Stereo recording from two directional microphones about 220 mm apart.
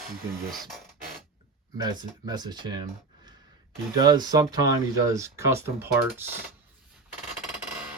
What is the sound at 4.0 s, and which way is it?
Speech, 20° right (ahead or behind).